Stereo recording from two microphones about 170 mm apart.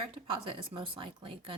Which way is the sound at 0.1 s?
30° right (ahead or behind).